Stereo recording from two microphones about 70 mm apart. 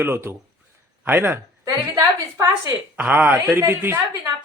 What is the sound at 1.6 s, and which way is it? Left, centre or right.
Speech, right.